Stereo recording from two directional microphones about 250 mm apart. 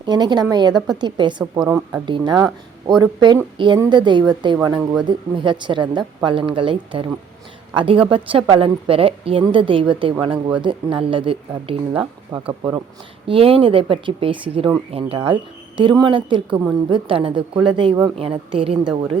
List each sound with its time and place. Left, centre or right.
0.0 s a woman's voice: centre